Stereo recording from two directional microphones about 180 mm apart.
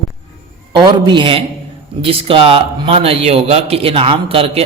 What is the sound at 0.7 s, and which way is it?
A woman's voice, 25° right (ahead or behind).